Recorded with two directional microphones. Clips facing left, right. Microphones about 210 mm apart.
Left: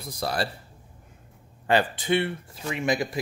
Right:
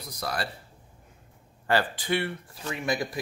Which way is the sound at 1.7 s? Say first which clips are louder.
Left 3 dB; 20° left (ahead or behind).